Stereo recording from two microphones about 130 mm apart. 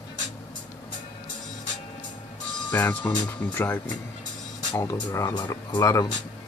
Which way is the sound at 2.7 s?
15° left (ahead or behind).